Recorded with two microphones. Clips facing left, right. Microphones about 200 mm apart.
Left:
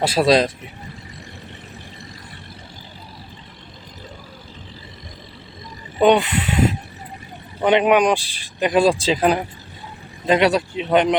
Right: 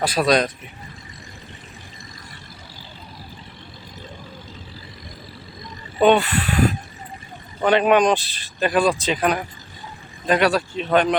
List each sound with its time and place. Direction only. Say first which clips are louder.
0.0 s speech: left 3 dB; 25° left (ahead or behind)
6.0 s speech: left 1 dB; 15° left (ahead or behind)